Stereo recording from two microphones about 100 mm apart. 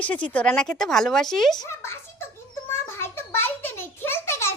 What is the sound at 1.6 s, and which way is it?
Speech, 25° left (ahead or behind).